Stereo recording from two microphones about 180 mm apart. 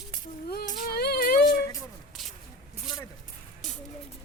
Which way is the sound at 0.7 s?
60° left (ahead or behind).